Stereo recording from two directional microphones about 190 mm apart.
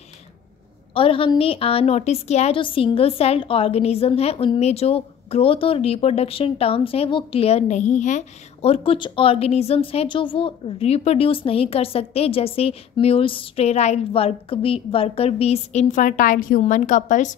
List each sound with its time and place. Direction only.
0.9 s a woman's voice: 30° left (ahead or behind)